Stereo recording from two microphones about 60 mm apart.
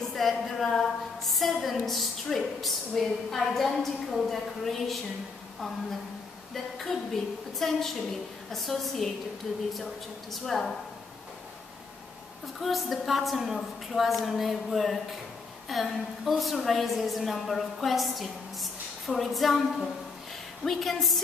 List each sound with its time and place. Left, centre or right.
0.1 s a woman's voice: centre
6.5 s a woman's voice: centre
12.5 s a woman's voice: centre